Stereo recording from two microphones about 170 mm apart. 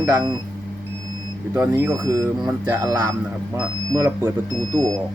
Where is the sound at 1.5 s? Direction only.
15° right (ahead or behind).